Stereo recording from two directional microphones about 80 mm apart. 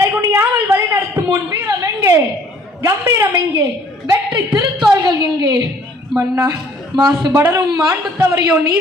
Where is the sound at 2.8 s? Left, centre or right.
Right.